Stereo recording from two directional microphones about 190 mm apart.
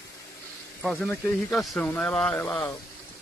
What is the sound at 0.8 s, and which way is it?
Speech, centre (ahead or behind).